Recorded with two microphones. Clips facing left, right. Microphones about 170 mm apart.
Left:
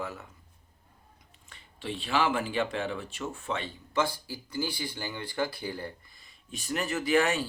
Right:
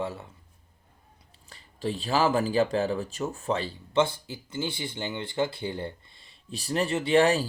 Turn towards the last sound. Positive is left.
turn(degrees=-30)  # may be behind; listen again after turning